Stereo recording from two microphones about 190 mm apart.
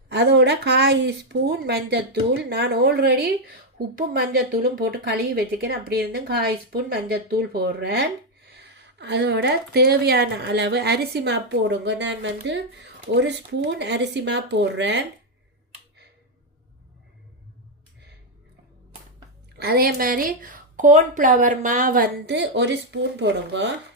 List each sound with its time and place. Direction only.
0.1 s a woman's voice: 65° right (ahead or behind)
19.6 s a woman's voice: 55° right (ahead or behind)